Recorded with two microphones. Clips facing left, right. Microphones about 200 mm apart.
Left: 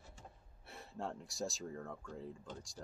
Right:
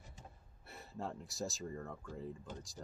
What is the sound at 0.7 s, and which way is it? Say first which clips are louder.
Speech: even; centre (ahead or behind).